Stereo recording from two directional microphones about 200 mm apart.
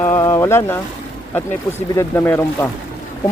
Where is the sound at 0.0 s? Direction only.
15° left (ahead or behind).